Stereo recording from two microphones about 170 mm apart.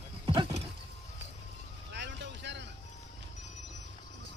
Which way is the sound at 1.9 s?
90° right.